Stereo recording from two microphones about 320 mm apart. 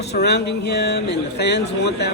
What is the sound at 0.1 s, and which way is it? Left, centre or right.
Speech, left.